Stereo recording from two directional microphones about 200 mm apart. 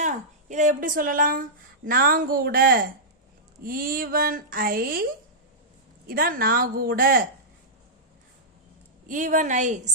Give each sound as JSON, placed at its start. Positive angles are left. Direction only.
{"t": 0.0, "sound": "a woman's voice", "side_deg": -35}
{"t": 6.1, "sound": "a woman's voice", "side_deg": -45}
{"t": 9.0, "sound": "a woman's voice", "side_deg": -40}